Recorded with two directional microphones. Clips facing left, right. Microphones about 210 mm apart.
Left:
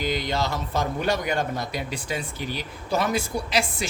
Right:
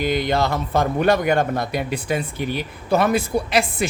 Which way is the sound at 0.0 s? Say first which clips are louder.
Right 6 dB; 55° right (ahead or behind).